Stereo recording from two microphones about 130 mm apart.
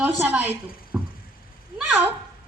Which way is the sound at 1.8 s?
15° right (ahead or behind).